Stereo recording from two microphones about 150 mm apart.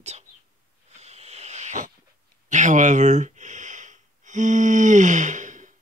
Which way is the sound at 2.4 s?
55° right (ahead or behind).